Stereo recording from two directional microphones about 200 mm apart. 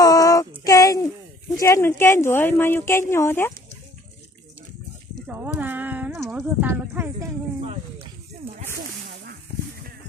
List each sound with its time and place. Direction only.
0.0 s child singing: 20° left (ahead or behind)
0.6 s music: 15° left (ahead or behind)
1.5 s speech: 15° left (ahead or behind)
5.2 s a sound: 10° right (ahead or behind)
8.0 s snake: 30° right (ahead or behind)